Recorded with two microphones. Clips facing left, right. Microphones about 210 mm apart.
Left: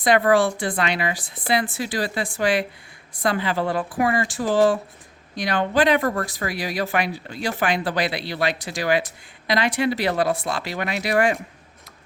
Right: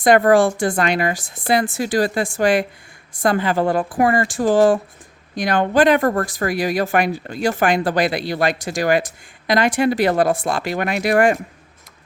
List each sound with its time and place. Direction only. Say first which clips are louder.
0.0 s speech: right 5 dB; 45° right (ahead or behind)